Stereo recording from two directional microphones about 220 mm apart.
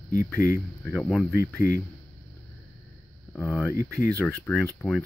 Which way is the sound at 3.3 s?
5° left (ahead or behind).